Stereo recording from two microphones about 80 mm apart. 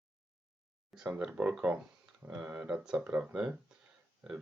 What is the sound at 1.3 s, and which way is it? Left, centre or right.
Speech, centre.